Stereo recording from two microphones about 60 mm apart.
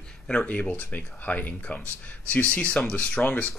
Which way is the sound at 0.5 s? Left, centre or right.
Left.